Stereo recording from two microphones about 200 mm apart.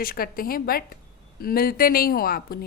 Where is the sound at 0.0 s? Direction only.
45° left (ahead or behind).